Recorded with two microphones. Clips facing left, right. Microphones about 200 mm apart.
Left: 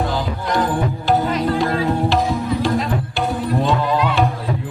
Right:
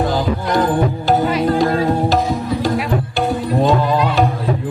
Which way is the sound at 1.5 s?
40° right (ahead or behind).